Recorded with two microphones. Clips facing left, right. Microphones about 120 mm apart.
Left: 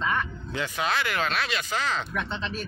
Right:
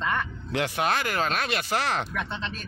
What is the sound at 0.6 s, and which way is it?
Speech, 50° right (ahead or behind).